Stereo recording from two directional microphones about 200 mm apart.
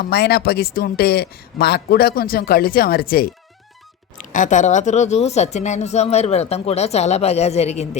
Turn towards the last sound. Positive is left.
turn(degrees=30)  # may be behind; listen again after turning